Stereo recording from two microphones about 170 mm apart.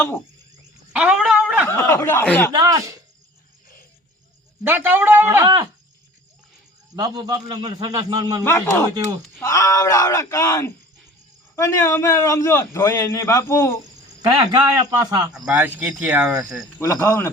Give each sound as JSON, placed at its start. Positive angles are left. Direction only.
{"t": 0.9, "sound": "dog", "side_deg": -5}
{"t": 1.6, "sound": "a man's voice", "side_deg": 15}
{"t": 2.5, "sound": "a man's voice", "side_deg": -20}
{"t": 4.6, "sound": "speech", "side_deg": -10}
{"t": 6.9, "sound": "a man's voice", "side_deg": -25}
{"t": 8.4, "sound": "a man's voice", "side_deg": 15}
{"t": 14.5, "sound": "a man's voice", "side_deg": -25}
{"t": 15.3, "sound": "speech", "side_deg": -10}
{"t": 16.7, "sound": "a man's voice", "side_deg": 15}